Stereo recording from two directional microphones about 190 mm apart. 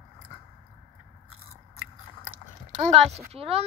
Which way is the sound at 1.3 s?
90° right.